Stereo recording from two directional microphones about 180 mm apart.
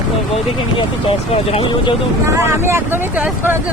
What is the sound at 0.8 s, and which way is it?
Speech, 30° left (ahead or behind).